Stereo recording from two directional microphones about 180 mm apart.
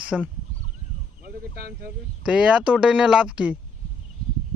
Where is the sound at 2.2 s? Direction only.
5° right (ahead or behind).